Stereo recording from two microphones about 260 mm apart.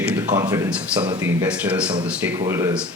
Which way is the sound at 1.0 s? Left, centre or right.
Centre.